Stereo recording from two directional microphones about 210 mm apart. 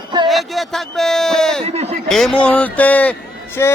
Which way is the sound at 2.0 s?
Centre (ahead or behind).